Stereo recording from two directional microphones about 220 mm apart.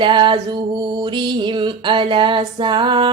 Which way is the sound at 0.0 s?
20° right (ahead or behind).